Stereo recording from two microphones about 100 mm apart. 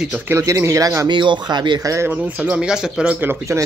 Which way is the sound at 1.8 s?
30° right (ahead or behind).